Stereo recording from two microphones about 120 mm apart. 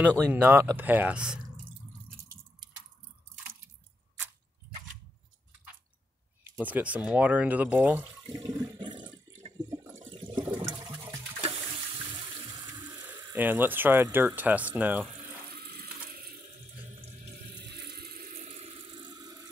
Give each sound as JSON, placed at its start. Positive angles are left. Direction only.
{"t": 0.3, "sound": "speech", "side_deg": -15}
{"t": 6.4, "sound": "speech", "side_deg": -15}
{"t": 8.4, "sound": "toilet flush", "side_deg": -40}
{"t": 9.7, "sound": "water", "side_deg": -25}
{"t": 10.0, "sound": "toilet flush", "side_deg": -45}
{"t": 13.0, "sound": "speech", "side_deg": -15}
{"t": 18.3, "sound": "water", "side_deg": -75}